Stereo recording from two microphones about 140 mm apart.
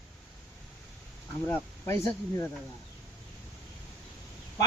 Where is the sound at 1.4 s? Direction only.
15° left (ahead or behind).